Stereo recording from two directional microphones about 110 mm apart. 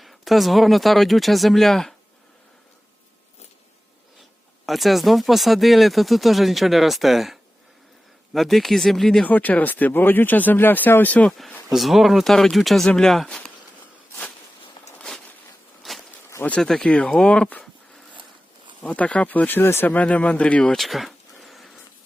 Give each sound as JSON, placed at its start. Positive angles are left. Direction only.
{"t": 0.0, "sound": "speech", "side_deg": 0}
{"t": 4.6, "sound": "speech", "side_deg": 0}
{"t": 9.2, "sound": "speech", "side_deg": 15}
{"t": 11.3, "sound": "speech", "side_deg": 0}
{"t": 14.9, "sound": "a sound", "side_deg": 5}
{"t": 16.3, "sound": "a sound", "side_deg": 15}
{"t": 16.6, "sound": "speech", "side_deg": 5}
{"t": 18.8, "sound": "speech", "side_deg": 10}
{"t": 20.7, "sound": "a sound", "side_deg": 0}